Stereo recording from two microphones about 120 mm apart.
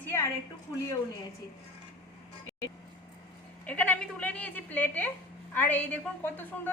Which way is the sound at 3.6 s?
10° left (ahead or behind).